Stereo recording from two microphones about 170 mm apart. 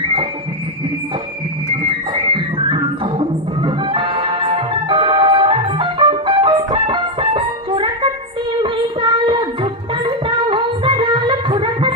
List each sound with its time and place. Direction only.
1.8 s music: 30° right (ahead or behind)
8.6 s child singing: 30° right (ahead or behind)